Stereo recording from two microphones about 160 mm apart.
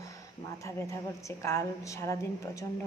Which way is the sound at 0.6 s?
20° left (ahead or behind).